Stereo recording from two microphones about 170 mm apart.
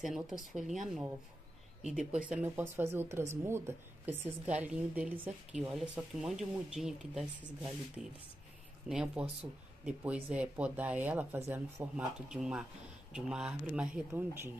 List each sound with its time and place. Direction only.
0.0 s speech: centre (ahead or behind)
8.8 s speech: 5° right (ahead or behind)